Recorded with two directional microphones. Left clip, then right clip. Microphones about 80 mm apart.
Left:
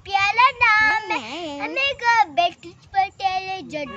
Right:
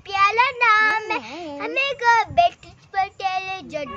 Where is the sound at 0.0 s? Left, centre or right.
Right.